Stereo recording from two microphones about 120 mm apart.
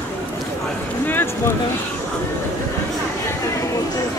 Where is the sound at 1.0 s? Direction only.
20° left (ahead or behind).